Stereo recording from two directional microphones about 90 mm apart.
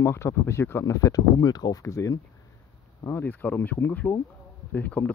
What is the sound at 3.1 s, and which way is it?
Speech, 20° left (ahead or behind).